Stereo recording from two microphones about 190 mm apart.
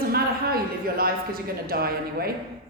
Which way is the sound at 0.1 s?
55° right (ahead or behind).